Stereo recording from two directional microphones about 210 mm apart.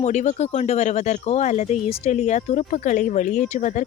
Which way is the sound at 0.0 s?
35° left (ahead or behind).